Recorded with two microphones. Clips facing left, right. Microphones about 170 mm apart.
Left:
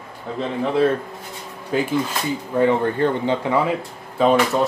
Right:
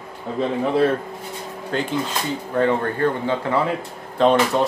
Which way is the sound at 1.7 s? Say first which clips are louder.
Left 3 dB; 10° left (ahead or behind).